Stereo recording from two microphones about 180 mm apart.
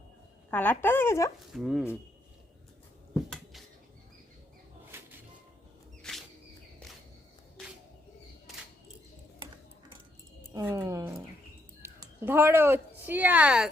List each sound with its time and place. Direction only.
0.5 s speech: 10° left (ahead or behind)
1.5 s speech: centre (ahead or behind)
3.2 s a sound: centre (ahead or behind)
4.9 s music: 15° right (ahead or behind)
6.0 s a sound: centre (ahead or behind)
10.5 s speech: 15° right (ahead or behind)